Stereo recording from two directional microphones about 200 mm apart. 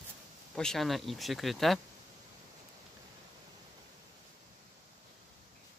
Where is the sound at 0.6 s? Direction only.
Centre (ahead or behind).